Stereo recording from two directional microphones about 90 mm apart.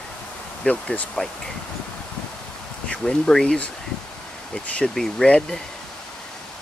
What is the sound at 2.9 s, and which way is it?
Speech, 5° left (ahead or behind).